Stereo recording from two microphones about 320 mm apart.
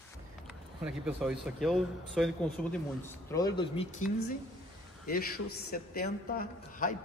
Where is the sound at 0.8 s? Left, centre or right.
Centre.